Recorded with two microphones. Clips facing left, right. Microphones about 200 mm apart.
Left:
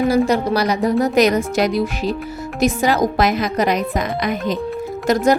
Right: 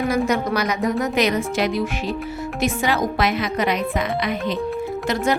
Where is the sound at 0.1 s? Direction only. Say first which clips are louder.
Left 4 dB; 35° left (ahead or behind).